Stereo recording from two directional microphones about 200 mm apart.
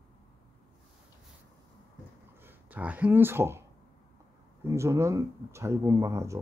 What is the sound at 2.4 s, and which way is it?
Speech, 10° right (ahead or behind).